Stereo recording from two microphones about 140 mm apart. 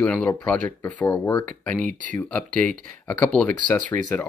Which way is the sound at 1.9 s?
65° right (ahead or behind).